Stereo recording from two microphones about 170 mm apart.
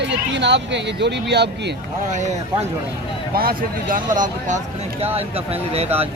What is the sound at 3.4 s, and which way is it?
Speech, 60° right (ahead or behind).